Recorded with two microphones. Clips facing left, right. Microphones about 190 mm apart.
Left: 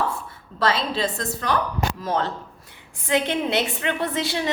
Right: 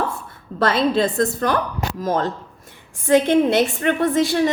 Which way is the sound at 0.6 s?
50° right (ahead or behind).